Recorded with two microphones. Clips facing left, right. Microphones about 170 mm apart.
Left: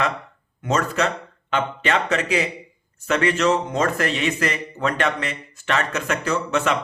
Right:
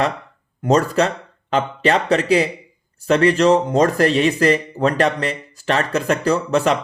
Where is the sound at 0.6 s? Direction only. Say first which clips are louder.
Right 6 dB; 35° right (ahead or behind).